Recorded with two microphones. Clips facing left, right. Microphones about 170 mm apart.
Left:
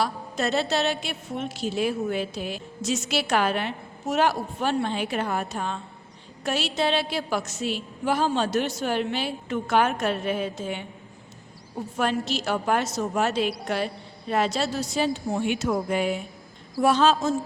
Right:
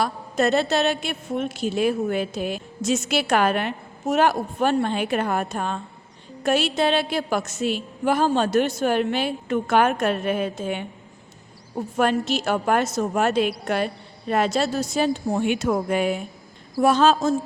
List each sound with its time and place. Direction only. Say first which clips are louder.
0.0 s a woman's voice: right 4 dB; 50° right (ahead or behind)
11.9 s a woman's voice: right 4 dB; 50° right (ahead or behind)